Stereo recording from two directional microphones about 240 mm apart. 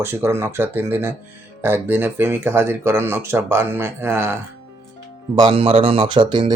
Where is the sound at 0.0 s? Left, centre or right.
Centre.